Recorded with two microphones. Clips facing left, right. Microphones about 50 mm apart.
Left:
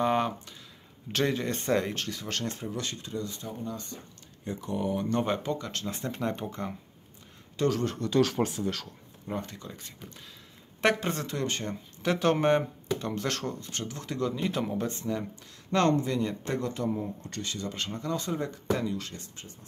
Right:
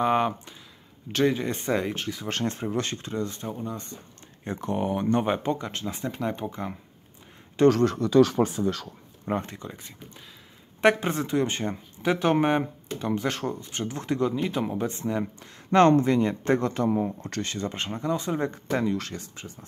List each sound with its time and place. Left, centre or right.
0.0 s speech: centre
2.2 s speech: right
3.6 s speech: right
4.5 s speech: right
5.1 s speech: right
7.6 s speech: right
9.2 s speech: right
9.5 s speech: right
9.8 s speech: centre
12.0 s speech: centre
14.3 s speech: centre
15.7 s speech: right
16.9 s speech: right
18.4 s speech: right